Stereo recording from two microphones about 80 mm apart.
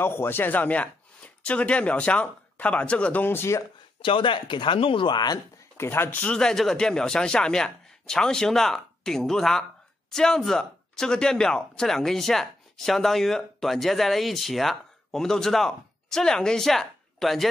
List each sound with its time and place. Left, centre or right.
0.0 s a man's voice: left
4.0 s speech: left
5.8 s speech: left
6.0 s a man's voice: centre